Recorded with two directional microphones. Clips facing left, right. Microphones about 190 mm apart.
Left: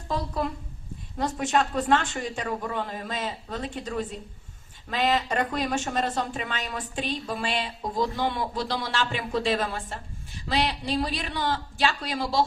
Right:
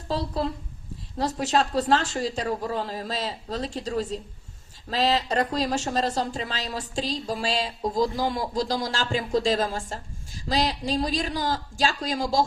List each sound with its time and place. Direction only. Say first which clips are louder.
0.1 s a woman's voice: right 2 dB; 30° right (ahead or behind)